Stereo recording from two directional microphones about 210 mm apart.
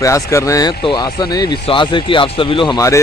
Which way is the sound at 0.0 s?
15° left (ahead or behind).